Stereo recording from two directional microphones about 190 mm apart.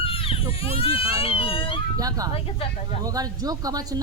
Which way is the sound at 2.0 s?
20° right (ahead or behind).